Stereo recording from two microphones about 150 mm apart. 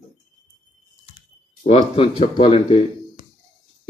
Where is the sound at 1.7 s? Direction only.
40° left (ahead or behind).